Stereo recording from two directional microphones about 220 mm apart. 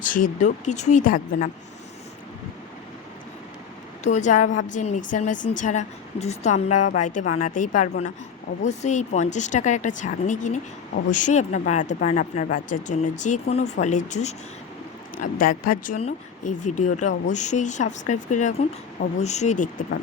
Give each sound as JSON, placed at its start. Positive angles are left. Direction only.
{"t": 0.0, "sound": "a woman's voice", "side_deg": 35}
{"t": 4.0, "sound": "a woman's voice", "side_deg": 35}
{"t": 15.9, "sound": "a woman's voice", "side_deg": 30}